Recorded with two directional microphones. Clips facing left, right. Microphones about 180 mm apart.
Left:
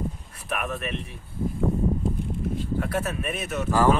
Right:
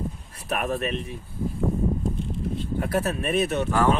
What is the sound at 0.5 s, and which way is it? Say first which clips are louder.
Speech: right 4 dB; 35° right (ahead or behind).